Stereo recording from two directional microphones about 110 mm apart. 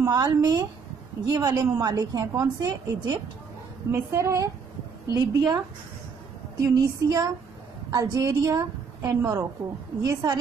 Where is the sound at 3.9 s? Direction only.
25° right (ahead or behind).